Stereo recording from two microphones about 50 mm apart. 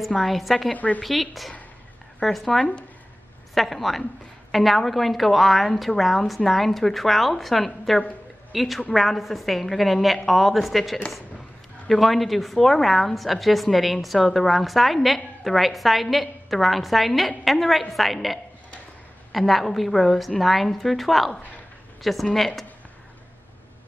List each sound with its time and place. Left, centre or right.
0.2 s a woman's voice: centre
0.7 s a woman's voice: left
1.0 s a woman's voice: centre